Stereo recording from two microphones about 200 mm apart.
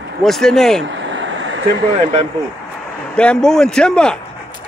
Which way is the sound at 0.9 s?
65° right (ahead or behind).